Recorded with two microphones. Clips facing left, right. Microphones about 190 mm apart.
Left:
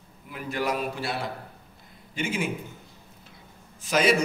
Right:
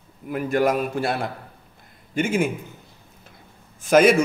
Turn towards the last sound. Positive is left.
turn(degrees=-50)  # may be behind; listen again after turning